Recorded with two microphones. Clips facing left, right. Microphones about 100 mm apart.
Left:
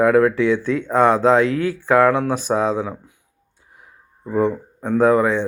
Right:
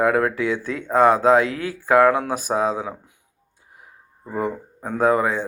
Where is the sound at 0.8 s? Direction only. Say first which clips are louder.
Even; 10° right (ahead or behind).